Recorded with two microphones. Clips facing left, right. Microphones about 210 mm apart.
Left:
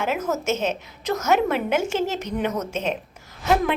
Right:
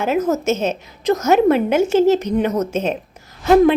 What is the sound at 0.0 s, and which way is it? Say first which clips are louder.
A woman's voice: right 7 dB; 35° right (ahead or behind).